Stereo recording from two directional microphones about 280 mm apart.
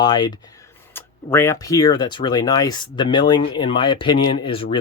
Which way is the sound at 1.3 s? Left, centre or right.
Centre.